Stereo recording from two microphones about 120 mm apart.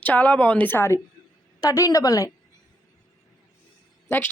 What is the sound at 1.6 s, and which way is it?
Speech, 30° left (ahead or behind).